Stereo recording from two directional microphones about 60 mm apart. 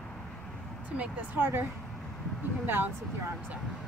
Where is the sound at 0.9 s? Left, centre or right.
Right.